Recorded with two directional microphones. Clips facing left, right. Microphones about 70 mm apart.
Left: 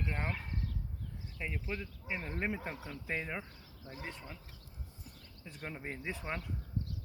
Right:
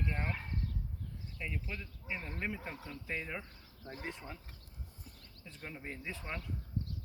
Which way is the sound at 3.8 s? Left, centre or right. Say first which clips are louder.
Right 1 dB; right.